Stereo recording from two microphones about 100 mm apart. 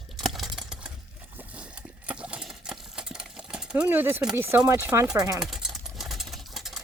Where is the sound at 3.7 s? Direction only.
20° right (ahead or behind).